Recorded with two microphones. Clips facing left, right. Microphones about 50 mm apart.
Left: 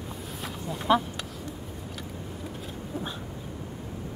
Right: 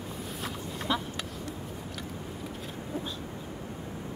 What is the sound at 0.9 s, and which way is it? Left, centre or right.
Speech, left.